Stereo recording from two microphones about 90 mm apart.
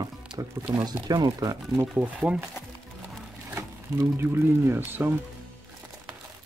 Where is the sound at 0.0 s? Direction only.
50° right (ahead or behind).